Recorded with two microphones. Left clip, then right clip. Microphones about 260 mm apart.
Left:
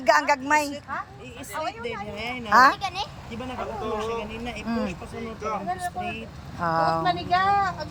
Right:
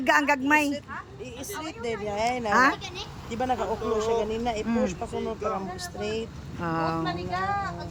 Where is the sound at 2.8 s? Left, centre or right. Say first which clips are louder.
Left 8 dB; centre.